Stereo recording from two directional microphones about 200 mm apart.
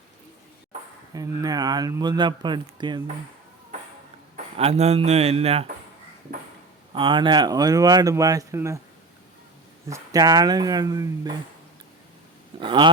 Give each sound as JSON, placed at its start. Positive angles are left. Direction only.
{"t": 1.1, "sound": "speech", "side_deg": -20}
{"t": 4.5, "sound": "speech", "side_deg": -30}
{"t": 6.9, "sound": "speech", "side_deg": -25}
{"t": 9.9, "sound": "speech", "side_deg": -20}
{"t": 12.5, "sound": "speech", "side_deg": -25}